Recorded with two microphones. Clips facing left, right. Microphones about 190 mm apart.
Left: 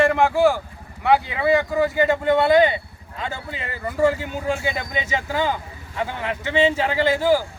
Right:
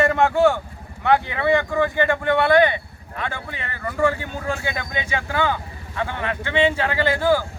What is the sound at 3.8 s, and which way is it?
Speech, 10° left (ahead or behind).